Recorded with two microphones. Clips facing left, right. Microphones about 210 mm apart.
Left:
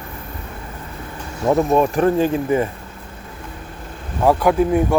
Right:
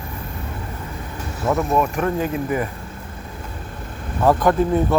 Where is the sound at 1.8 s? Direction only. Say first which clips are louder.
Left 5 dB; 30° left (ahead or behind).